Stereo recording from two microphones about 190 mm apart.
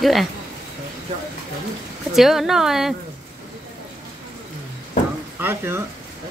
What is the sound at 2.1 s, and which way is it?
Speech, centre (ahead or behind).